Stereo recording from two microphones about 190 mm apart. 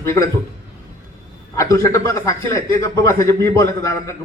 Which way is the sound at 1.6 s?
15° left (ahead or behind).